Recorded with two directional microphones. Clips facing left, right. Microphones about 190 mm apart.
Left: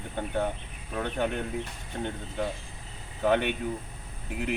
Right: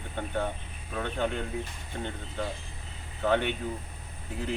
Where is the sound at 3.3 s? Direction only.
15° left (ahead or behind).